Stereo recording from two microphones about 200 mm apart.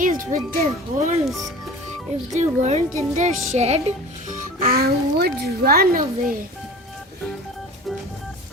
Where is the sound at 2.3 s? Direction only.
35° right (ahead or behind).